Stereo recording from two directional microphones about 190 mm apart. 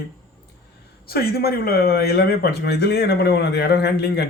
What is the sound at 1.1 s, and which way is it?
Speech, 55° left (ahead or behind).